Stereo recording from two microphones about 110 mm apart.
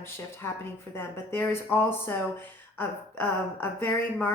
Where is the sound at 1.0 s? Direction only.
20° left (ahead or behind).